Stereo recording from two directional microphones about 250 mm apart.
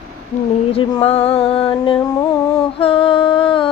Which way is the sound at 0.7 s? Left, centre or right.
Left.